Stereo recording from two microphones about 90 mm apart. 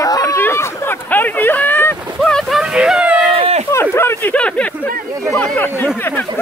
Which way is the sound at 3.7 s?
30° left (ahead or behind).